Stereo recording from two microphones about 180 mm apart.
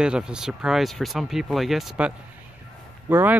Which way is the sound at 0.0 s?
5° right (ahead or behind).